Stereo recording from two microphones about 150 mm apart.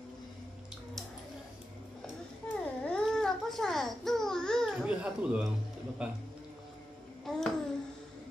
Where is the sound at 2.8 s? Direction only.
5° left (ahead or behind).